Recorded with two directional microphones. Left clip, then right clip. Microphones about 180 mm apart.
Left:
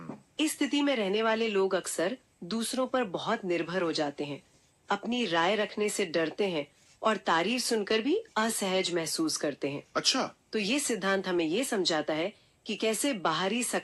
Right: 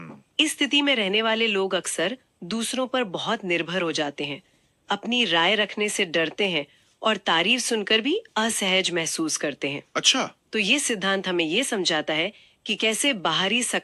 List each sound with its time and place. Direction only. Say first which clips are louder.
0.3 s speech: right 8 dB; 20° right (ahead or behind)